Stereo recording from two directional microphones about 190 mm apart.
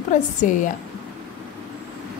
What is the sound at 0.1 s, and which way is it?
Speech, 40° left (ahead or behind).